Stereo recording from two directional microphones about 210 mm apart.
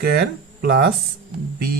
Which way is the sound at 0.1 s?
50° right (ahead or behind).